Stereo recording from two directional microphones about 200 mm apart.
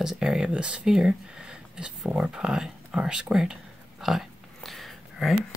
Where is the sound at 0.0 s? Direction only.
5° right (ahead or behind).